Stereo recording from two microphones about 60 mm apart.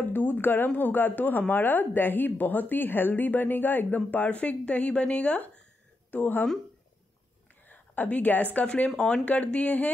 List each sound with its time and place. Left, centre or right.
0.1 s a woman's voice: left
7.6 s a sound: left
8.5 s speech: left